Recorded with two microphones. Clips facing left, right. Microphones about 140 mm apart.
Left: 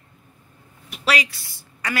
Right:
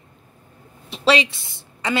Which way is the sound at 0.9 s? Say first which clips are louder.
Right 5 dB; 25° right (ahead or behind).